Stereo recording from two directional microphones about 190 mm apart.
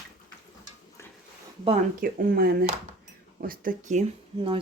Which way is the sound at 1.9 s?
50° right (ahead or behind).